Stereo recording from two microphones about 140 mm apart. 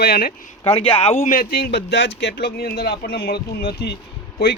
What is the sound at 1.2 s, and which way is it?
Speech, 85° left.